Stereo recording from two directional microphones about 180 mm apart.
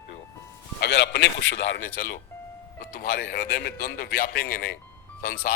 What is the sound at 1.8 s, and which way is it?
A man's voice, 50° left (ahead or behind).